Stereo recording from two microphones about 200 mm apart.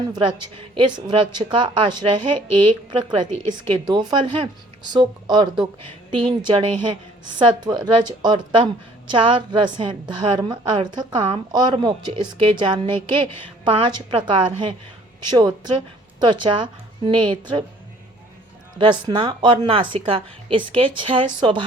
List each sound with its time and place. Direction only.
0.1 s a woman's voice: 20° right (ahead or behind)
18.8 s a woman's voice: 25° right (ahead or behind)